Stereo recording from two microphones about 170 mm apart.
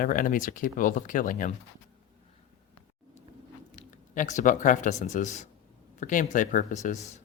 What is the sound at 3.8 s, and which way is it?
Speech, 50° left (ahead or behind).